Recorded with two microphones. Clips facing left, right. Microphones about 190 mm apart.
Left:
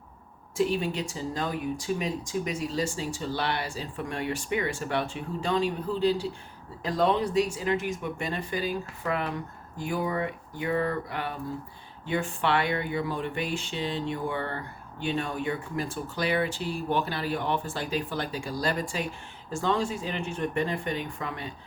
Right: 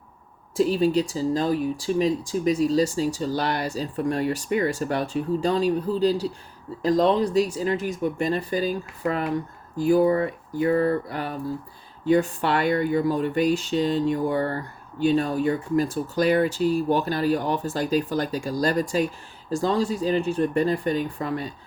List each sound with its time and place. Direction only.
0.5 s speech: 35° right (ahead or behind)